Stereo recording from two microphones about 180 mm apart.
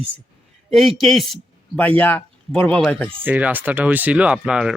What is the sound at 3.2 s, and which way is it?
Speech, 10° right (ahead or behind).